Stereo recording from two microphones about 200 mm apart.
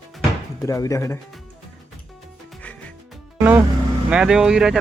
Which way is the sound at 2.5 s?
5° left (ahead or behind).